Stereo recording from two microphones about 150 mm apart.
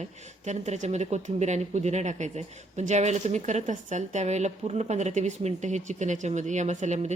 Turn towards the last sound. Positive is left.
turn(degrees=-50)  # may be behind; listen again after turning